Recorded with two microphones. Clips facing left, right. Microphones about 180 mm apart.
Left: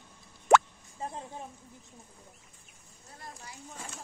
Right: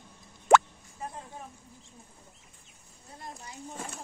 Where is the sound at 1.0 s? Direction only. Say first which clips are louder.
Left 2 dB; 25° left (ahead or behind).